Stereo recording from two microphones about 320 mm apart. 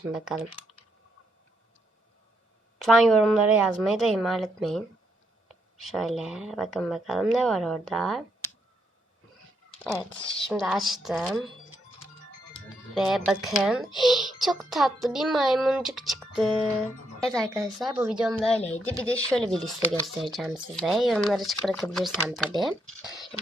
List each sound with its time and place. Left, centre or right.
2.7 s speech: centre
5.8 s speech: centre
9.7 s speech: centre
12.9 s speech: centre
18.6 s speech: centre
19.0 s speech: centre